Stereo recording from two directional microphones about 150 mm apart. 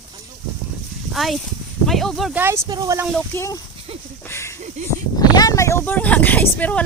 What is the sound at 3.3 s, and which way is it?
Speech, 20° left (ahead or behind).